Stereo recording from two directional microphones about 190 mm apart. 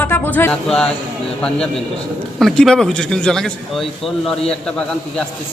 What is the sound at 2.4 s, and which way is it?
A man's voice, centre (ahead or behind).